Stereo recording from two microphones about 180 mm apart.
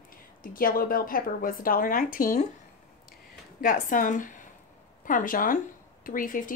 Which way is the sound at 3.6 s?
45° left (ahead or behind).